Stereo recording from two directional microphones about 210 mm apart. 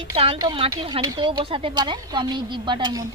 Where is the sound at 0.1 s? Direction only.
25° right (ahead or behind).